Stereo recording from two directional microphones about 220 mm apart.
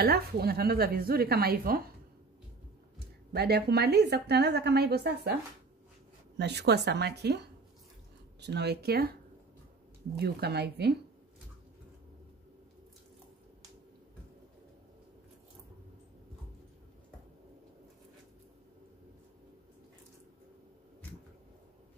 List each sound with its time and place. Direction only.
0.0 s a woman's voice: 45° right (ahead or behind)
3.3 s a woman's voice: 45° right (ahead or behind)
10.1 s a woman's voice: 45° right (ahead or behind)